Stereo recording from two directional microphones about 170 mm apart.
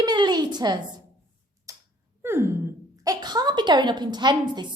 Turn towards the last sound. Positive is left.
turn(degrees=-25)  # may be behind; listen again after turning